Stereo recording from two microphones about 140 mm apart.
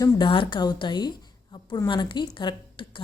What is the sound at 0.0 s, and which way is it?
A woman's voice, 35° left (ahead or behind).